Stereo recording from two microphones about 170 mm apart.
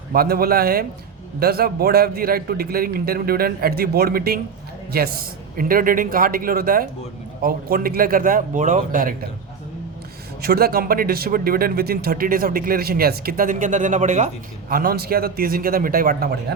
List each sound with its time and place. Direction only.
0.1 s speech: 60° right (ahead or behind)
10.4 s speech: 65° right (ahead or behind); by 14.3 s 45° right (ahead or behind)
14.7 s speech: 60° right (ahead or behind)